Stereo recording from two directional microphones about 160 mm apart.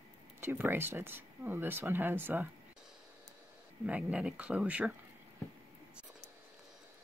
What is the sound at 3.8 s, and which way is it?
Speech, 10° right (ahead or behind).